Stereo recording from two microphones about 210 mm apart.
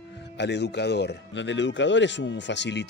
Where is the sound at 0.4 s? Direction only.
55° left (ahead or behind).